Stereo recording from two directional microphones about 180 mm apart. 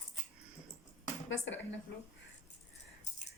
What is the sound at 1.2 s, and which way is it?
Speech, 90° left.